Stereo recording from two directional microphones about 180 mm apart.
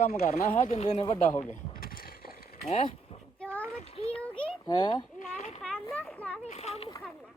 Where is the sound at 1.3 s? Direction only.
15° left (ahead or behind).